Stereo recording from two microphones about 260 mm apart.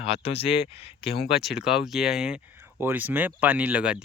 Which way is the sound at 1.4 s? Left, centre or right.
Centre.